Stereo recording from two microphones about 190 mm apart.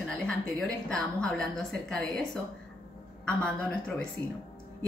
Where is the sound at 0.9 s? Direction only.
5° left (ahead or behind).